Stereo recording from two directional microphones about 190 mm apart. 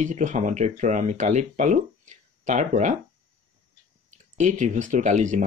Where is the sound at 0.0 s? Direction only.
40° right (ahead or behind).